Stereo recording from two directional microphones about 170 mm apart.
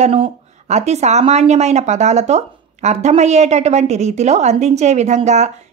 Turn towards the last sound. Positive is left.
turn(degrees=-45)  # may be behind; listen again after turning